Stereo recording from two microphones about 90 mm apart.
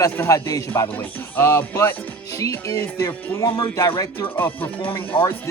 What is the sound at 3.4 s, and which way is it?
Speech, 50° left (ahead or behind).